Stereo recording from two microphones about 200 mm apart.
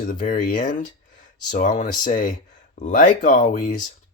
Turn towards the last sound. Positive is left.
turn(degrees=40)  # may be behind; listen again after turning